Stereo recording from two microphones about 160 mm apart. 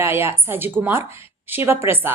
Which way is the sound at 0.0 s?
15° right (ahead or behind).